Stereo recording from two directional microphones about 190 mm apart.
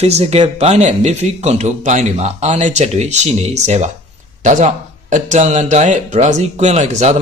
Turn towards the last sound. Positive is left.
turn(degrees=-40)  # may be behind; listen again after turning